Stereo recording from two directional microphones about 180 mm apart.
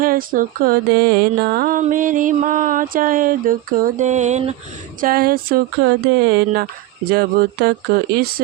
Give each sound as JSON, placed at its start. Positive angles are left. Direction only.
{"t": 0.0, "sound": "mantra", "side_deg": -50}
{"t": 1.8, "sound": "a sound", "side_deg": -45}
{"t": 4.9, "sound": "mantra", "side_deg": -55}